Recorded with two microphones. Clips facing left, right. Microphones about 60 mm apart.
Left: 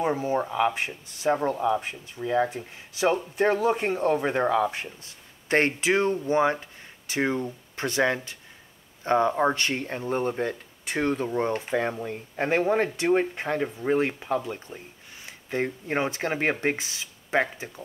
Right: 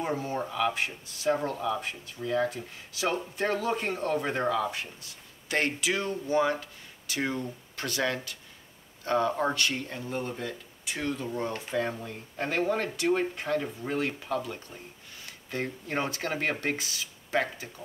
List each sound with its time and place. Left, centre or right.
0.0 s speech: centre